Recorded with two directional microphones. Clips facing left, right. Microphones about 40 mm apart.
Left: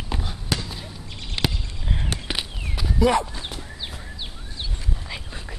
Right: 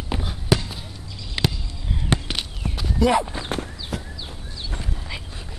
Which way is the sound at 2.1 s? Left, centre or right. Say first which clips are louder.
Right 8 dB; right.